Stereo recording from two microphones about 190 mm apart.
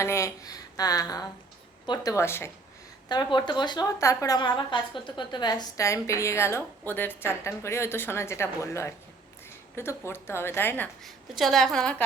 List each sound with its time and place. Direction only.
0.0 s speech: 15° left (ahead or behind)
11.0 s a woman's voice: centre (ahead or behind)